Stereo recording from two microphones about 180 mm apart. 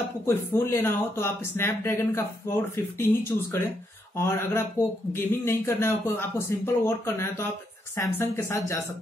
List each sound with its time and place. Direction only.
0.3 s speech: 15° left (ahead or behind)